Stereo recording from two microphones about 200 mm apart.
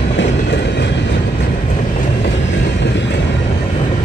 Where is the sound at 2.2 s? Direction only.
60° left (ahead or behind).